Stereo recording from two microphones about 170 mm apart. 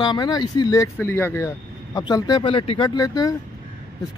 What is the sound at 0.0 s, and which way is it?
Speech, 25° left (ahead or behind).